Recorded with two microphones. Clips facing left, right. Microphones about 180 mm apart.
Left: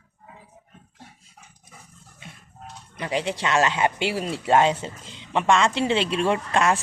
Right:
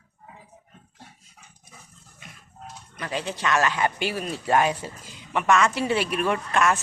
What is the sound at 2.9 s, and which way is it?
Speech, 25° left (ahead or behind).